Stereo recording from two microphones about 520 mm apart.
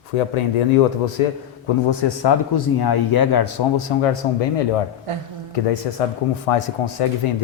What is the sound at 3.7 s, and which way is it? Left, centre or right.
Speech, left.